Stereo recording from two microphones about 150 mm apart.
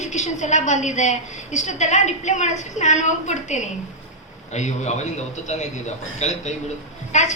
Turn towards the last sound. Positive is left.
turn(degrees=50)  # may be behind; listen again after turning